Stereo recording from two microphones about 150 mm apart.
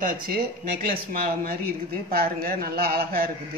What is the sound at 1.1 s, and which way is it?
Speech, 90° right.